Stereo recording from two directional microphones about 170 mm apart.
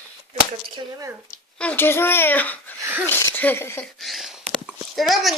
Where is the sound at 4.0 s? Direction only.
Centre (ahead or behind).